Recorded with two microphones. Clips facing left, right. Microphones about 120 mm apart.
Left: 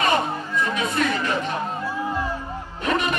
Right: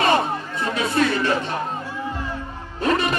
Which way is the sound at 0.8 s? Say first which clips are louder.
Right 7 dB; 30° right (ahead or behind).